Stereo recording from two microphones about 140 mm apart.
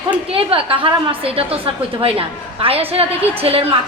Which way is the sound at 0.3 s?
40° right (ahead or behind).